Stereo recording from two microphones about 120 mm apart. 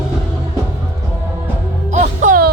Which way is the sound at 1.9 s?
90° right.